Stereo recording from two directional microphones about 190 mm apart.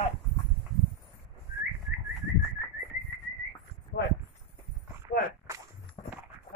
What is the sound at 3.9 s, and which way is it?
Clip-clop, 60° left (ahead or behind).